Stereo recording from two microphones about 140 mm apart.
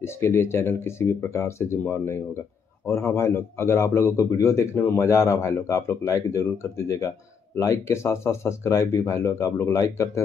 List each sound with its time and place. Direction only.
0.0 s a man's voice: 20° left (ahead or behind)